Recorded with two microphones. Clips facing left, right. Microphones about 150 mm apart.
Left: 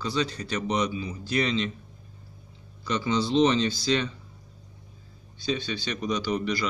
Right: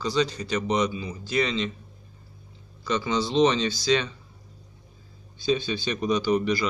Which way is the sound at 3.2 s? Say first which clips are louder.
Even; 90° right.